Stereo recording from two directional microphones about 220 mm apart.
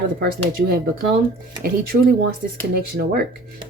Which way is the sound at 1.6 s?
40° right (ahead or behind).